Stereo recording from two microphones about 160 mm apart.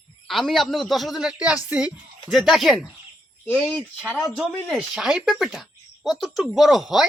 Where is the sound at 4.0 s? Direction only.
5° right (ahead or behind).